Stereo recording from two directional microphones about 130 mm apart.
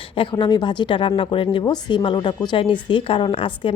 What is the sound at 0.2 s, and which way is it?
A woman's voice, 40° left (ahead or behind).